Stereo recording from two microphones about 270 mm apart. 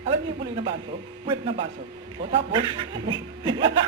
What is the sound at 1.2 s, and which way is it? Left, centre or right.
A woman's voice, right.